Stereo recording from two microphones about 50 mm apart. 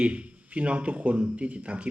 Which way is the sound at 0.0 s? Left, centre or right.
Right.